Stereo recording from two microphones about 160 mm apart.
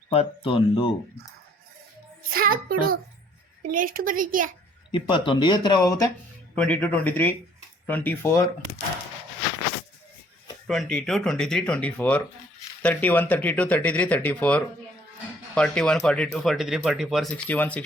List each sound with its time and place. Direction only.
0.1 s speech: 35° left (ahead or behind)
2.3 s a woman's voice: 65° right (ahead or behind)
4.9 s speech: 30° left (ahead or behind)
6.6 s speech: 5° left (ahead or behind)
10.7 s speech: 5° left (ahead or behind)